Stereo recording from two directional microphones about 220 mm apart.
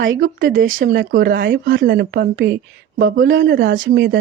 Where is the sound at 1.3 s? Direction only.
55° right (ahead or behind).